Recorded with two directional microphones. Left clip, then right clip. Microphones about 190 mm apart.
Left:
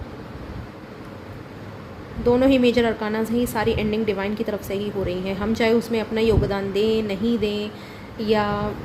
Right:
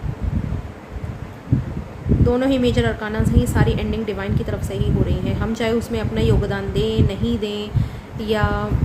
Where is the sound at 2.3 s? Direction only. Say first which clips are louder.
Left 2 dB; 15° left (ahead or behind).